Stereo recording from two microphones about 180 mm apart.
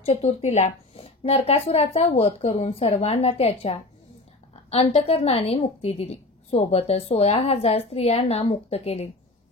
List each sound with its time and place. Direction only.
0.0 s a woman's voice: 35° left (ahead or behind)